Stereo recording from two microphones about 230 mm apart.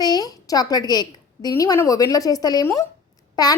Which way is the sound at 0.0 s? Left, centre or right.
Centre.